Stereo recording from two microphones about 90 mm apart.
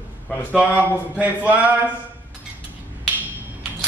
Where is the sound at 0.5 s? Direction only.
15° right (ahead or behind).